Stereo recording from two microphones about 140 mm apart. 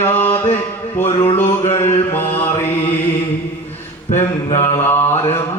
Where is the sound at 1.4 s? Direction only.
45° left (ahead or behind).